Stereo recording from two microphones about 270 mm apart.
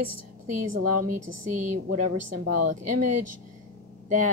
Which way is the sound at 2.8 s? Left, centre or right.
Right.